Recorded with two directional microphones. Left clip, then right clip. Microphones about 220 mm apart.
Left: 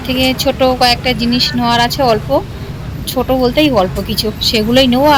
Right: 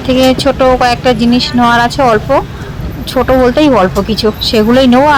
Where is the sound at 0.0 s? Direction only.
15° right (ahead or behind).